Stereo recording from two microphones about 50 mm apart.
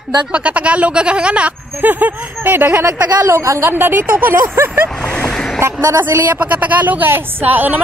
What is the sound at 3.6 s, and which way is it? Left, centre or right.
Speech, right.